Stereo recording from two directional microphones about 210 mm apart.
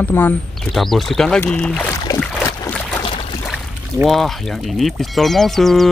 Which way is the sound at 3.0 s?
25° left (ahead or behind).